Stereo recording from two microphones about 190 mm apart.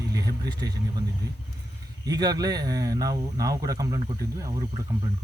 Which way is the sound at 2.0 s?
20° right (ahead or behind).